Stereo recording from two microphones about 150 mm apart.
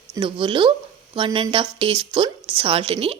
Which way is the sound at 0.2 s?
35° right (ahead or behind).